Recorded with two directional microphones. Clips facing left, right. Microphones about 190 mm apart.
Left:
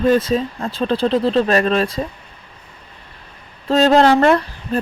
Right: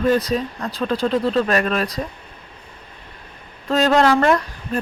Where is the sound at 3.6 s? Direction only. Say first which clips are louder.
Left 3 dB; 30° left (ahead or behind).